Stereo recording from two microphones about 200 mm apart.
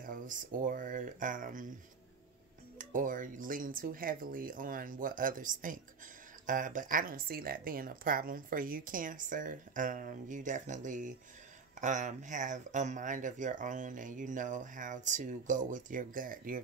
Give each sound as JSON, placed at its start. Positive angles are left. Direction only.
{"t": 0.0, "sound": "speech", "side_deg": -45}
{"t": 2.8, "sound": "speech", "side_deg": -40}